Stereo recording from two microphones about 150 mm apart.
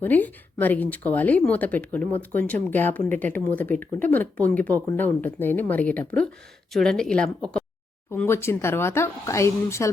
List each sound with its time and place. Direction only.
0.0 s speech: 10° left (ahead or behind)